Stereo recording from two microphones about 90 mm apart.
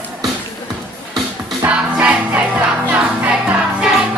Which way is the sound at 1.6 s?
20° right (ahead or behind).